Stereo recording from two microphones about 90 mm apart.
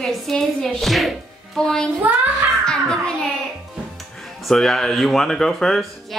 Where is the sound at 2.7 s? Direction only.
10° left (ahead or behind).